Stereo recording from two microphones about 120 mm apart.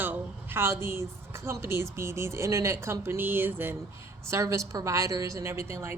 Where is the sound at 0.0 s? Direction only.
15° right (ahead or behind).